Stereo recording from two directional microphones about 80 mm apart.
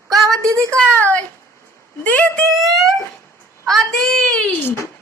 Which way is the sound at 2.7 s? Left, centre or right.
Centre.